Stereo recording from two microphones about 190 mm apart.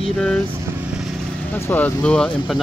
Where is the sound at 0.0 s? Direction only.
5° left (ahead or behind).